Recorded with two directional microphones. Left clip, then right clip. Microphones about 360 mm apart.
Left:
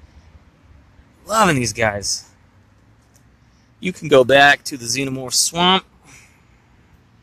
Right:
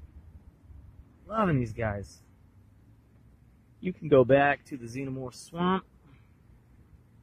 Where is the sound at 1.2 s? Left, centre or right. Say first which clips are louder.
Left 13 dB; centre.